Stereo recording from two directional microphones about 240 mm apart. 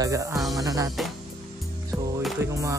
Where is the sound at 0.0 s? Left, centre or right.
Centre.